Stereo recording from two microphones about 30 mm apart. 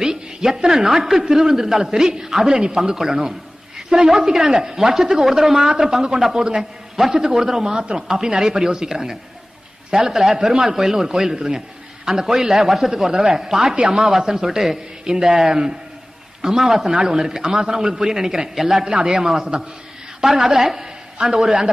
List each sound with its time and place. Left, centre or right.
0.1 s a sound: centre
0.7 s a man's voice: centre
5.7 s a man's voice: right
7.7 s speech: right
8.1 s a man's voice: right
10.8 s a man's voice: centre
11.3 s a man's voice: right
16.9 s speech: right
17.2 s a man's voice: centre
18.9 s a man's voice: right
20.2 s a man's voice: centre